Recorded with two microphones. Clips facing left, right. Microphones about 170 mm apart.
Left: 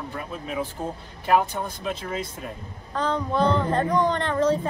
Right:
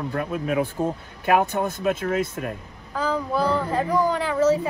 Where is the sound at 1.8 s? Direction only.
50° right (ahead or behind).